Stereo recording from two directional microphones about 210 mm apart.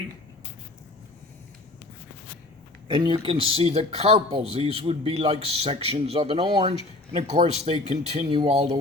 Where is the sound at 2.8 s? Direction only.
25° right (ahead or behind).